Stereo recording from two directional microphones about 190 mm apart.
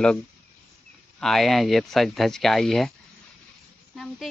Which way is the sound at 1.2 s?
Centre (ahead or behind).